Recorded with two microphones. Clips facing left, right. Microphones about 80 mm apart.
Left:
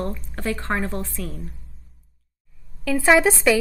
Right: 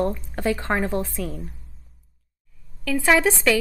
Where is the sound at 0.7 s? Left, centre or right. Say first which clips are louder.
Even; right.